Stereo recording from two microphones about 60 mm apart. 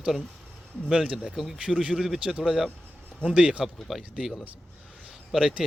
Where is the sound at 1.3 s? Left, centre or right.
Centre.